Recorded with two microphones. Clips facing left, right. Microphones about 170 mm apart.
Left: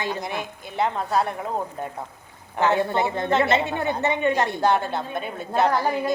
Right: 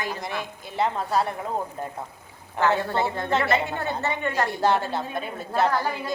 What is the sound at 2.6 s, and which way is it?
A woman's voice, 20° left (ahead or behind).